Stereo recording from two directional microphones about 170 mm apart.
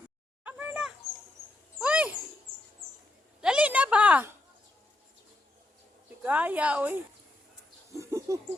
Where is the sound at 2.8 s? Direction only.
60° right (ahead or behind).